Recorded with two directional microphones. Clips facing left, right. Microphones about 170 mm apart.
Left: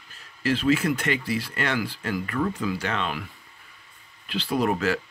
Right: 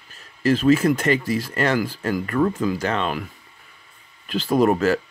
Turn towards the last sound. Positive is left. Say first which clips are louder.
# right 6 dB
turn(degrees=-45)  # may be behind; listen again after turning